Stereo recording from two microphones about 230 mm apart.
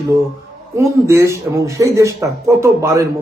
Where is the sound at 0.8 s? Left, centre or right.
Centre.